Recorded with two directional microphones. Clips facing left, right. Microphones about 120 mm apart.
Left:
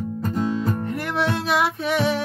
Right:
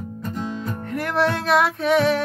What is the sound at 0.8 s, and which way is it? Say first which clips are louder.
Music: right 2 dB; centre (ahead or behind).